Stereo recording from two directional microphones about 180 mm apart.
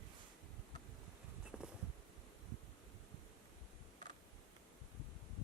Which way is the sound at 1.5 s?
5° right (ahead or behind).